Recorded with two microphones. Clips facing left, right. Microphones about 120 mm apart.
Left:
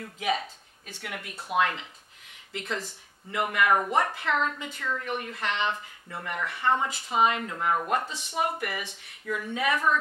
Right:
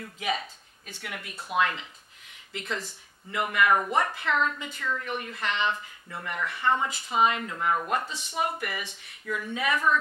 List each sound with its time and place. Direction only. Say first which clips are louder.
0.0 s a man's voice: left 2 dB; 45° left (ahead or behind)
5.8 s a woman's voice: even; 35° left (ahead or behind)
6.9 s a woman's voice: even; 50° left (ahead or behind); by 8.2 s 30° left (ahead or behind)
8.4 s a man's voice: left 1 dB; 45° left (ahead or behind)
8.8 s a woman's voice: left 1 dB; 35° left (ahead or behind)